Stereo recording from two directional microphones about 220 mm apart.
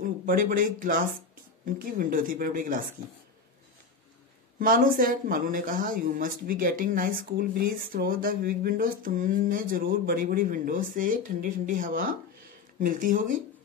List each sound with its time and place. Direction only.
0.0 s speech: 40° right (ahead or behind)
4.6 s speech: 40° right (ahead or behind)